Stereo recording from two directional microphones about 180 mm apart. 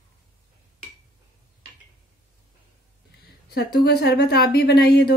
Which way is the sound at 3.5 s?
60° left (ahead or behind).